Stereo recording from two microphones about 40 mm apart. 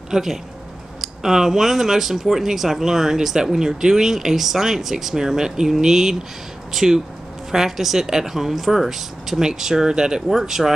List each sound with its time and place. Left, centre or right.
0.1 s speech: centre